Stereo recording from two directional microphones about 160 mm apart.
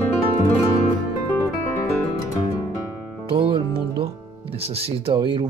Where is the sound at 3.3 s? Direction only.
35° right (ahead or behind).